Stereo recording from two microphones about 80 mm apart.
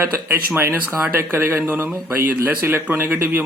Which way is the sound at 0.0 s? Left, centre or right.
Right.